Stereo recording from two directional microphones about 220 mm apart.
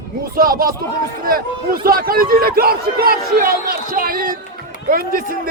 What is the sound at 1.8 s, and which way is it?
Speech, 40° right (ahead or behind).